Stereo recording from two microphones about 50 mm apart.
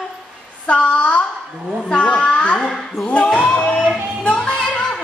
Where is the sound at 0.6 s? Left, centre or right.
Left.